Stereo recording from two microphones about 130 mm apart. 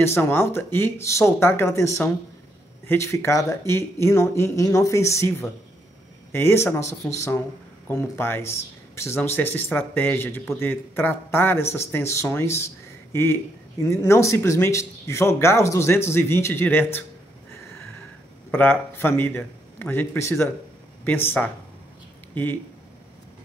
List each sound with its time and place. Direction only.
0.0 s speech: 15° left (ahead or behind)
18.5 s speech: 15° left (ahead or behind)